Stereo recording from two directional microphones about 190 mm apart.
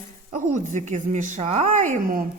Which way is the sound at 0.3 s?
40° right (ahead or behind).